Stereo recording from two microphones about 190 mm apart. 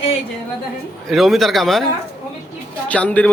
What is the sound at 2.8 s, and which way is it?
Speech, 5° left (ahead or behind).